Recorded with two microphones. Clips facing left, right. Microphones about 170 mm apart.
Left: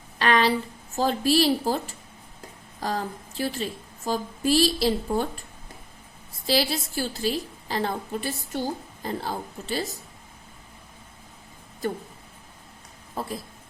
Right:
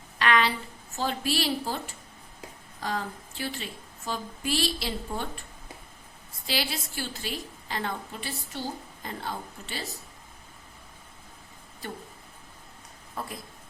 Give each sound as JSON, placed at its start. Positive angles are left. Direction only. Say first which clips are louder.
{"t": 0.2, "sound": "a sound", "louder": "left 3 dB", "side_deg": 35}
{"t": 0.9, "sound": "a woman's voice", "louder": "left 7 dB", "side_deg": 40}
{"t": 2.8, "sound": "a woman's voice", "louder": "left 3 dB", "side_deg": 40}
{"t": 6.5, "sound": "a woman's voice", "louder": "left 8 dB", "side_deg": 35}
{"t": 13.1, "sound": "speech", "louder": "left 5 dB", "side_deg": 30}